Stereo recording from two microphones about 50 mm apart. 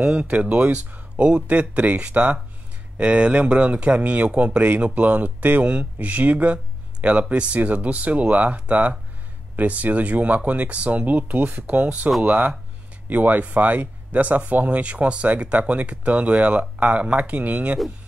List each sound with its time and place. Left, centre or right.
0.0 s speech: right